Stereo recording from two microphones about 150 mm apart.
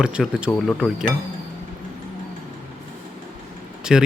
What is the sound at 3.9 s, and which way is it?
Speech, 5° right (ahead or behind).